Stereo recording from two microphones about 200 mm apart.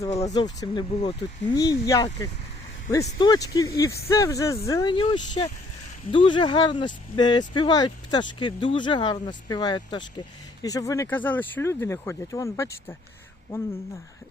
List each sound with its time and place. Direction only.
0.1 s speech: 30° left (ahead or behind)
0.3 s speech: 20° left (ahead or behind)
3.2 s speech: 20° left (ahead or behind)